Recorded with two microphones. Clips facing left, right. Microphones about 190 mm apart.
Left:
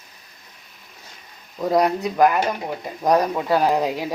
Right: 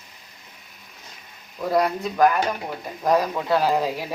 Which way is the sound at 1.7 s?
20° left (ahead or behind).